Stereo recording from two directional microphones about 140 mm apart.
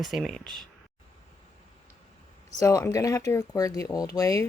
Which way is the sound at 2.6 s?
25° left (ahead or behind).